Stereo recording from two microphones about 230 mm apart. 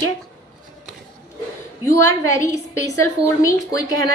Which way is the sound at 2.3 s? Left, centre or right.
Centre.